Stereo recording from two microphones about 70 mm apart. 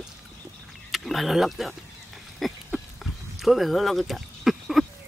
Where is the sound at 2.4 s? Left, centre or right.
Centre.